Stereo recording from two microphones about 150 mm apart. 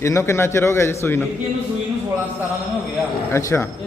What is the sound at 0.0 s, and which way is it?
A man's voice, 20° left (ahead or behind).